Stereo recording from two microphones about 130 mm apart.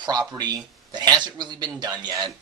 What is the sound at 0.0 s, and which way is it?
Speech, 30° right (ahead or behind).